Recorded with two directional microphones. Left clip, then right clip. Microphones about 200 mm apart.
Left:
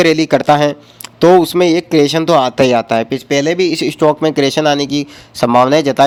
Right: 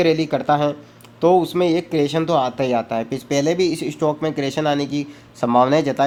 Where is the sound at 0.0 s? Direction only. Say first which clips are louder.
Left 7 dB; 50° left (ahead or behind).